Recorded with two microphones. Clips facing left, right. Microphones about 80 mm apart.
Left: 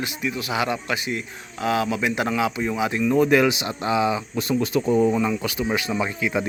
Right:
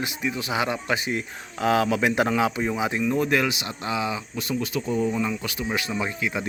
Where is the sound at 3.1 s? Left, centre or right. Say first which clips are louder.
Left 7 dB; centre.